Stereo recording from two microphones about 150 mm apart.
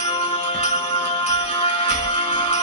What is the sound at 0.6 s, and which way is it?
Music, 40° left (ahead or behind).